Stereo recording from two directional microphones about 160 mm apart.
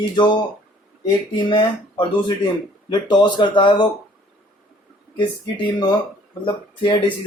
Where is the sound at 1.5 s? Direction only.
30° left (ahead or behind).